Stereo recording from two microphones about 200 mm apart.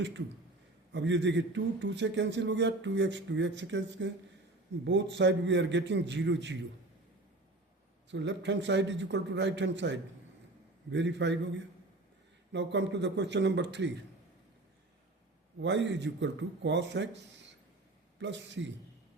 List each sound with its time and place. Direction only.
0.9 s speech: 65° right (ahead or behind)
8.1 s speech: 65° right (ahead or behind)
15.6 s speech: 60° right (ahead or behind)